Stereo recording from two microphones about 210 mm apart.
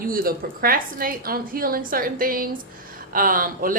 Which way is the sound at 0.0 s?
45° right (ahead or behind).